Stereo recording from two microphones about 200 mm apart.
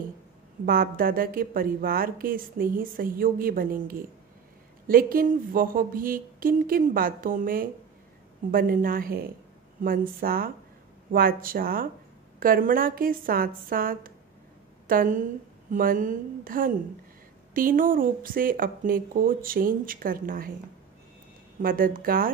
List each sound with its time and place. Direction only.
0.7 s a woman's voice: 45° right (ahead or behind)
21.5 s a woman's voice: 45° right (ahead or behind)